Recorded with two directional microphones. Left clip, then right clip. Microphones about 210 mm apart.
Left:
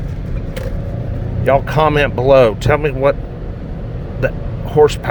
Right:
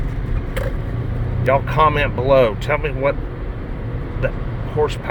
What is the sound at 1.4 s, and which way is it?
Speech, 30° left (ahead or behind).